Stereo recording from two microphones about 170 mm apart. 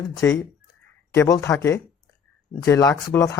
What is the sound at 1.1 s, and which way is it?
Speech, 15° left (ahead or behind).